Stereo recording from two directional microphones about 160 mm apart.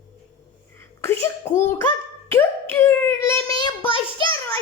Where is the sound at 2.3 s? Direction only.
15° left (ahead or behind).